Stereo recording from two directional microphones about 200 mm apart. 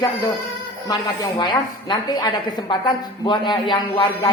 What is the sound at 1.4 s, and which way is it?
A woman's voice, 20° left (ahead or behind).